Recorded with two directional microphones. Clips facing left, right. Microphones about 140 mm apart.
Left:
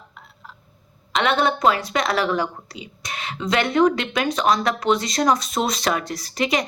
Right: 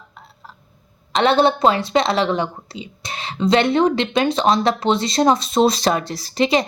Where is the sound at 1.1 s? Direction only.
30° right (ahead or behind).